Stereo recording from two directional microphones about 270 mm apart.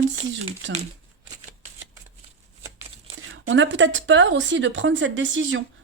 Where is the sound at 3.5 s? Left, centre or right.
Right.